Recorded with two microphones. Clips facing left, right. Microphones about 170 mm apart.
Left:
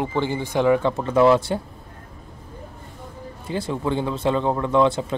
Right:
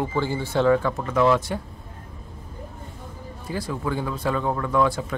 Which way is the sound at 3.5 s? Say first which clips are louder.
Left 3 dB; 25° left (ahead or behind).